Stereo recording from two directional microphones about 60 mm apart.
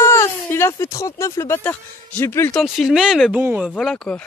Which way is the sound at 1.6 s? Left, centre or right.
Left.